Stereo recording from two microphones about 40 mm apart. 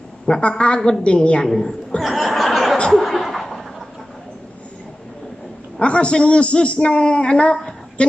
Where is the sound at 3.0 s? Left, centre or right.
Centre.